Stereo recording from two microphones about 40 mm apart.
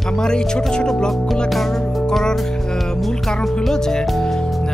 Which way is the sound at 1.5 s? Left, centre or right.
Centre.